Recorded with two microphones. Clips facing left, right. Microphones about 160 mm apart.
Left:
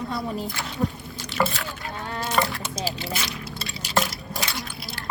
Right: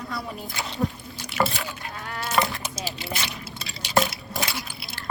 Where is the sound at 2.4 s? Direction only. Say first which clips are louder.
Right 1 dB; 20° right (ahead or behind).